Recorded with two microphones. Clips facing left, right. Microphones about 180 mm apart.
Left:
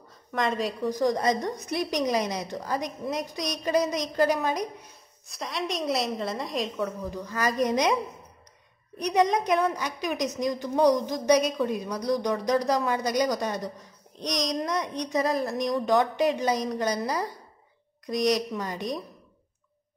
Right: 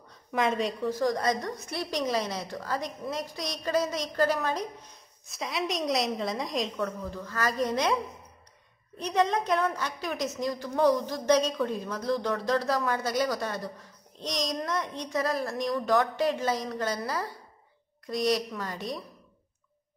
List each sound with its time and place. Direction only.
0.1 s a woman's voice: centre (ahead or behind)
0.8 s a woman's voice: 20° left (ahead or behind)
5.2 s a woman's voice: centre (ahead or behind)
7.1 s a woman's voice: 15° left (ahead or behind)